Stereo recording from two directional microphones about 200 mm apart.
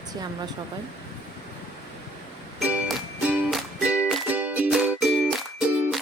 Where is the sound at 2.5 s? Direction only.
Centre (ahead or behind).